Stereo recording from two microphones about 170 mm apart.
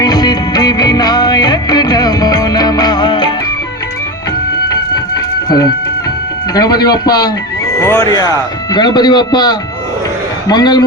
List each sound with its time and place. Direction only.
0.0 s music: 25° left (ahead or behind)
4.7 s music: 20° left (ahead or behind)
6.5 s speech: 20° left (ahead or behind)